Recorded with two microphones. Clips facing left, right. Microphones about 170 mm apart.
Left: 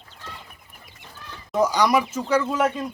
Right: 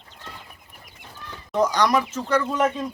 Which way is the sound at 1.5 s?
5° left (ahead or behind).